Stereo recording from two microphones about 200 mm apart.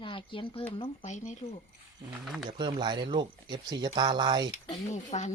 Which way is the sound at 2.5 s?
25° right (ahead or behind).